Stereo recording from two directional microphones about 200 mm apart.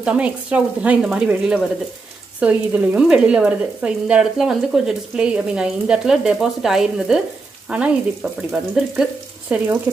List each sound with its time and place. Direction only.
0.0 s speech: 5° right (ahead or behind)